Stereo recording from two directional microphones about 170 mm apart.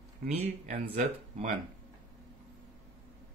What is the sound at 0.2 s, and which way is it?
Speech, 50° right (ahead or behind).